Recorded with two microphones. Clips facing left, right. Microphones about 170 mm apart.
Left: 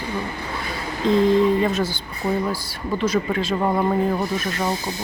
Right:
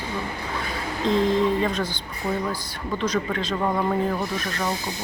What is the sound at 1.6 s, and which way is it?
Speech, 5° left (ahead or behind).